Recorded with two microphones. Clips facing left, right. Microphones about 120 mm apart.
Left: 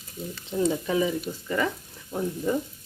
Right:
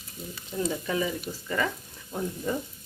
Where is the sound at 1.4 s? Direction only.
5° left (ahead or behind).